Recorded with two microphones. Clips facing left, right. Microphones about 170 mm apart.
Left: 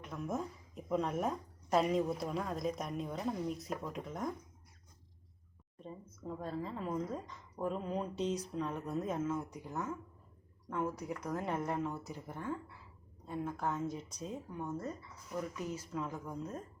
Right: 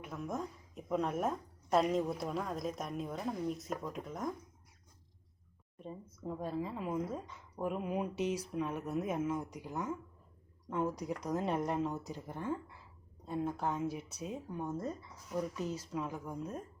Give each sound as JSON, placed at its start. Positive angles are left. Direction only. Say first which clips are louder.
{"t": 0.0, "sound": "a woman's voice", "louder": "left 1 dB", "side_deg": 0}
{"t": 5.8, "sound": "speech", "louder": "right 2 dB", "side_deg": -10}